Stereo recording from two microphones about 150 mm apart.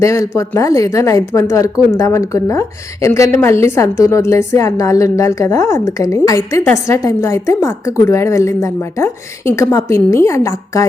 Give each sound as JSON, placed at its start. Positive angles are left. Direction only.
{"t": 0.0, "sound": "a woman's voice", "side_deg": 20}